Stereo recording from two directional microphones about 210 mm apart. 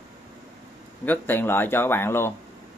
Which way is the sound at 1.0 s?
10° left (ahead or behind).